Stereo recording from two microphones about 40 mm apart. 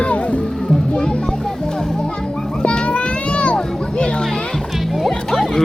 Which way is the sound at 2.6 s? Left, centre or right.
Left.